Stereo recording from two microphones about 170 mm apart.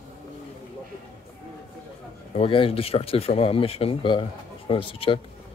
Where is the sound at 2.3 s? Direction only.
35° left (ahead or behind).